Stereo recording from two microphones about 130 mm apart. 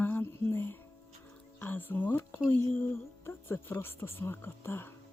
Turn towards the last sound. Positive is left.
turn(degrees=15)  # may be behind; listen again after turning